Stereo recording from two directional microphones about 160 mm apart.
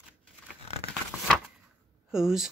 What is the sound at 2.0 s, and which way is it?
Speech, 5° right (ahead or behind).